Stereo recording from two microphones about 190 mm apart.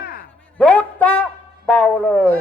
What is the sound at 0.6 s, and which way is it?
A man's voice, 5° left (ahead or behind).